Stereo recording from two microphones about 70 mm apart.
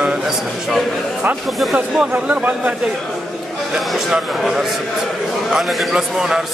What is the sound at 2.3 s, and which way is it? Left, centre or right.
Speech, right.